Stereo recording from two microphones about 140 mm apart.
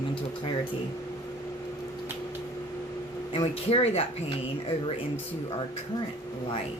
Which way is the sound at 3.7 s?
45° left (ahead or behind).